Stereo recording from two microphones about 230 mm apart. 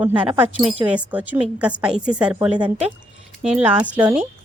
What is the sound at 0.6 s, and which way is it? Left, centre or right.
A woman's voice, centre.